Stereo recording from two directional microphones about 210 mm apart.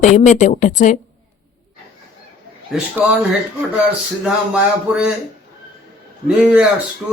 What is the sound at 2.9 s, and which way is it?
A man's voice, 5° right (ahead or behind).